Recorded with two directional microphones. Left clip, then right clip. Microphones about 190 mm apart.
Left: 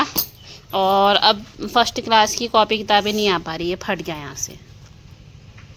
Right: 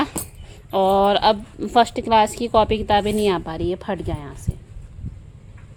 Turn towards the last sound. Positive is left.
turn(degrees=-10)  # may be behind; listen again after turning